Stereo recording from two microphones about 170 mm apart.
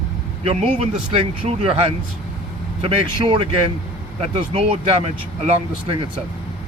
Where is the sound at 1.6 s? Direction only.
35° right (ahead or behind).